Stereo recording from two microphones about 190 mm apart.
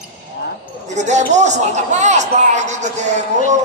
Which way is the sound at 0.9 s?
40° right (ahead or behind).